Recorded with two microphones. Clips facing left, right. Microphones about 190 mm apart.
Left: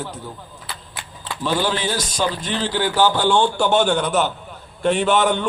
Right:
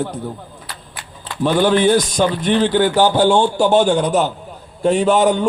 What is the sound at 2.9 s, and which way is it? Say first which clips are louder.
Speech: right 1 dB; 15° right (ahead or behind).